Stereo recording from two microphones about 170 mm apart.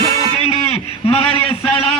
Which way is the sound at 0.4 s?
35° left (ahead or behind).